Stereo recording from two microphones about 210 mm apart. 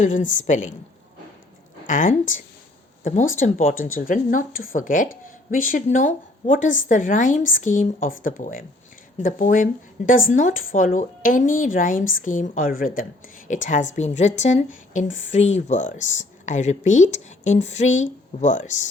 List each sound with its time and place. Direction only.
0.0 s speech: 35° left (ahead or behind)
1.9 s speech: 40° left (ahead or behind)